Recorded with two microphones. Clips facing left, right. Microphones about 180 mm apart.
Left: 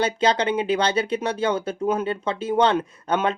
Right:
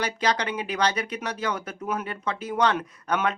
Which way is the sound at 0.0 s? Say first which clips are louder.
Left 5 dB; 25° left (ahead or behind).